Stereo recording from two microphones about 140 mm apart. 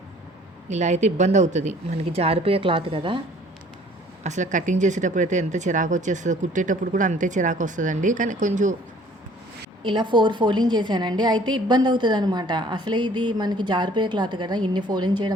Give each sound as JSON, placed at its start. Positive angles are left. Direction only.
{"t": 0.7, "sound": "speech", "side_deg": -55}
{"t": 4.2, "sound": "speech", "side_deg": -60}
{"t": 9.8, "sound": "a woman's voice", "side_deg": -35}